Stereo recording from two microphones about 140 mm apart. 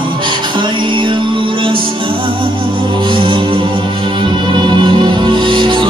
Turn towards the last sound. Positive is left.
turn(degrees=-35)  # may be behind; listen again after turning